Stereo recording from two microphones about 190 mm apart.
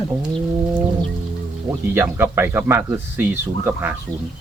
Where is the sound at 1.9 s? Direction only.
10° right (ahead or behind).